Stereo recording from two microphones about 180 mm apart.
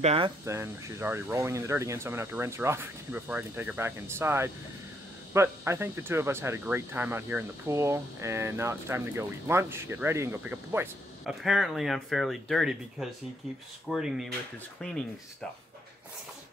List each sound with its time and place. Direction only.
0.0 s speech: 30° right (ahead or behind)
0.5 s speech: 15° right (ahead or behind)